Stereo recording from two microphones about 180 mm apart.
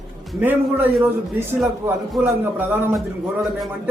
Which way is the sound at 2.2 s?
10° right (ahead or behind).